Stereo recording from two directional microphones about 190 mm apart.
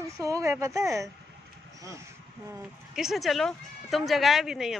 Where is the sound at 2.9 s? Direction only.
Centre (ahead or behind).